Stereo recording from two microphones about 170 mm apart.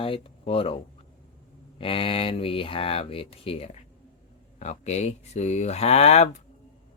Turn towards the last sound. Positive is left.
turn(degrees=40)  # may be behind; listen again after turning